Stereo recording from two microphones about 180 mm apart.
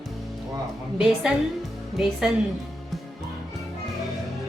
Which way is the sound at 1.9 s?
Centre (ahead or behind).